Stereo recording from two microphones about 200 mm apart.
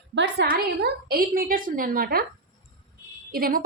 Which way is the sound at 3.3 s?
45° right (ahead or behind).